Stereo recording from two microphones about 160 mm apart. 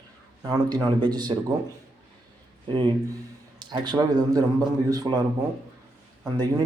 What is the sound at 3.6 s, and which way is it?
A man's voice, 25° right (ahead or behind).